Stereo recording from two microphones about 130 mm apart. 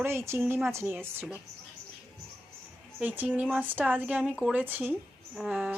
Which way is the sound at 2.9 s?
10° right (ahead or behind).